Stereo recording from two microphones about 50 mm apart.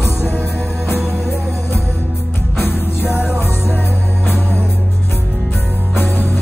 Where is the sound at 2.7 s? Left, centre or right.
Left.